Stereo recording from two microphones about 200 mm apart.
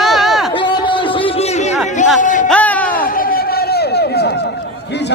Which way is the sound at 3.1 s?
45° left (ahead or behind).